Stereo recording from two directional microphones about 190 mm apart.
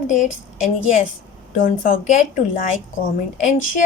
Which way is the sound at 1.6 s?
40° left (ahead or behind).